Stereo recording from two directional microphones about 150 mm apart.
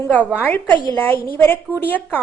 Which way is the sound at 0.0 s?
10° left (ahead or behind).